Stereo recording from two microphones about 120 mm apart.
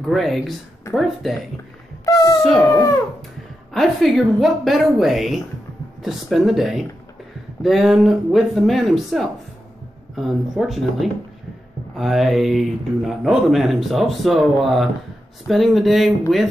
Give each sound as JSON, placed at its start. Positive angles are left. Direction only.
{"t": 0.0, "sound": "speech", "side_deg": 0}
{"t": 2.7, "sound": "speech", "side_deg": 25}
{"t": 3.7, "sound": "speech", "side_deg": 0}